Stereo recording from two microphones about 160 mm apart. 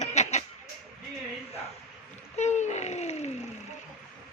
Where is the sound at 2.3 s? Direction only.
45° left (ahead or behind).